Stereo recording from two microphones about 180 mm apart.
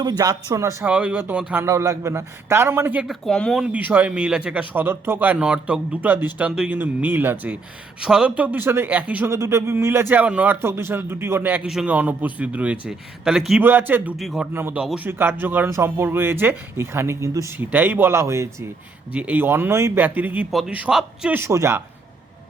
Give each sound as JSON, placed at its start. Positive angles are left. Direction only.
{"t": 0.0, "sound": "speech", "side_deg": -20}
{"t": 3.2, "sound": "speech", "side_deg": 5}